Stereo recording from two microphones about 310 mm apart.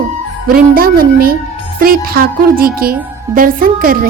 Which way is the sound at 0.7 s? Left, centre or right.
Right.